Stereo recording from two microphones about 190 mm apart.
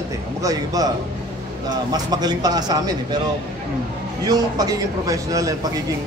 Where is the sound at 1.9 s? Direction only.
20° right (ahead or behind).